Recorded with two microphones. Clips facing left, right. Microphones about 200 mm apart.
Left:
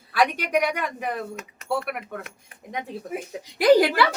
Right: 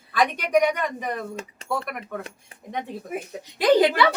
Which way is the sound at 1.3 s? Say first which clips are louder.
Right 2 dB; 30° right (ahead or behind).